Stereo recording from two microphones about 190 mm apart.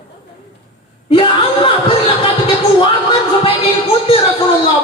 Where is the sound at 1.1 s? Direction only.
30° left (ahead or behind).